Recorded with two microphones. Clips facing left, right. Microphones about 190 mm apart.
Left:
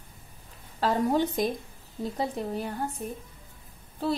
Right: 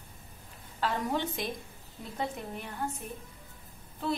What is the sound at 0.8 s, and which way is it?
Speech, 40° left (ahead or behind).